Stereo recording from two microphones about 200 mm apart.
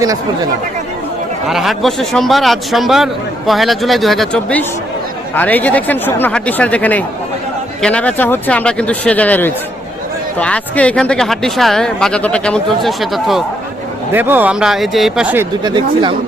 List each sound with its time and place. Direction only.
1.5 s a man's voice: centre (ahead or behind)
15.6 s speech: 25° right (ahead or behind)